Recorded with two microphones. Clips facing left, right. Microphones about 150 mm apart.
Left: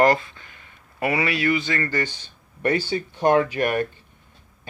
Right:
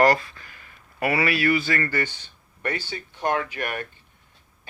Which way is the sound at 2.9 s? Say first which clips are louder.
Left 6 dB; 30° left (ahead or behind).